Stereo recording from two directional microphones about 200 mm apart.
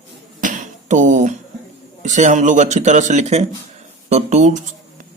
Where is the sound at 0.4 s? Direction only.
40° right (ahead or behind).